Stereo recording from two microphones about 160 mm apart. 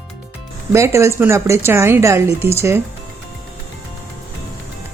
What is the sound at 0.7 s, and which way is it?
A woman's voice, 15° right (ahead or behind).